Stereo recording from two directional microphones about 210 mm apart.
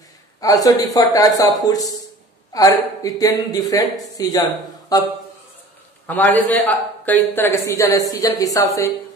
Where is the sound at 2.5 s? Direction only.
15° left (ahead or behind).